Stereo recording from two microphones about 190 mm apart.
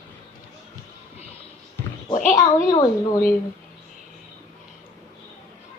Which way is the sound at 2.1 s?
40° left (ahead or behind).